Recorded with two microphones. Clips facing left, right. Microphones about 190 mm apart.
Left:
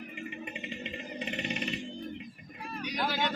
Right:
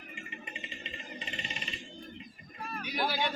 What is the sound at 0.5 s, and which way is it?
Music, 60° left (ahead or behind).